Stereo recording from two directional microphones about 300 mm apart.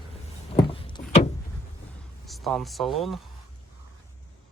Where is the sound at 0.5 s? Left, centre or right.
Centre.